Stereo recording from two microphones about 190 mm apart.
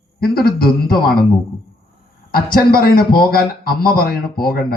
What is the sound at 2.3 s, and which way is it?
Speech, 50° left (ahead or behind).